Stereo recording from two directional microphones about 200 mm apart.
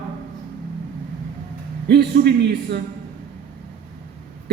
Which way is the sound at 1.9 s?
55° right (ahead or behind).